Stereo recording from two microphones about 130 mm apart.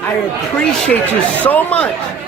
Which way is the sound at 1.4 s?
10° left (ahead or behind).